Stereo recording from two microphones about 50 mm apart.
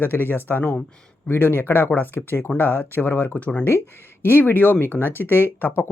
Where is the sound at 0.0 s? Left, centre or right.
Left.